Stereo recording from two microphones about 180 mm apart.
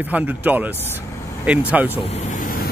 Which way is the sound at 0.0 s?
10° right (ahead or behind).